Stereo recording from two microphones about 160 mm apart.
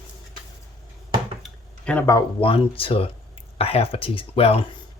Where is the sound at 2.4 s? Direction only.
35° left (ahead or behind).